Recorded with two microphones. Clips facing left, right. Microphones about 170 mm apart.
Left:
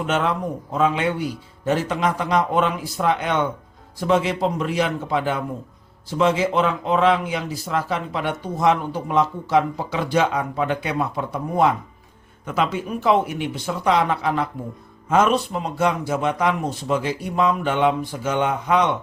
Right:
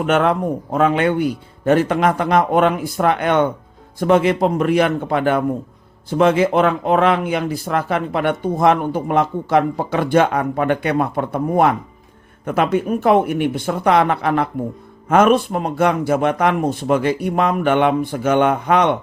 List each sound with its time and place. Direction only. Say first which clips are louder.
0.0 s speech: right 6 dB; 55° right (ahead or behind)